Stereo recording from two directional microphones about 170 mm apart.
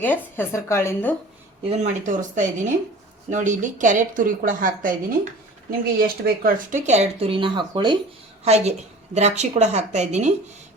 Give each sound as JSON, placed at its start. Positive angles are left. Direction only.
{"t": 0.0, "sound": "a woman's voice", "side_deg": 10}
{"t": 1.7, "sound": "a woman's voice", "side_deg": -45}
{"t": 6.0, "sound": "speech", "side_deg": -60}
{"t": 6.8, "sound": "a woman's voice", "side_deg": -40}
{"t": 8.4, "sound": "a woman's voice", "side_deg": -40}